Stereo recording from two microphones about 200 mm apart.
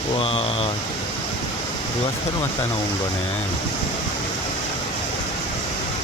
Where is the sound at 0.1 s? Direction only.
30° left (ahead or behind).